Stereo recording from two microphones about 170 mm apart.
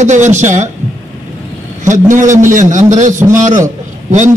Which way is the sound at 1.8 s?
50° right (ahead or behind).